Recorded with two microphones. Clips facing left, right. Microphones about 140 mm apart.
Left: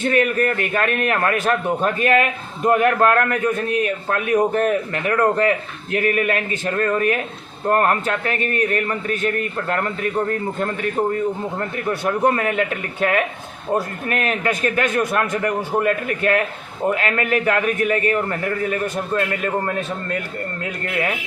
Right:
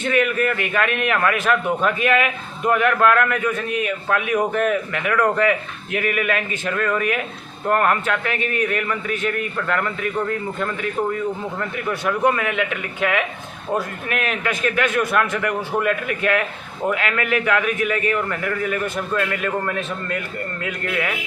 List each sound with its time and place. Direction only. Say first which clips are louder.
0.0 s a man's voice: left 1 dB; 40° left (ahead or behind)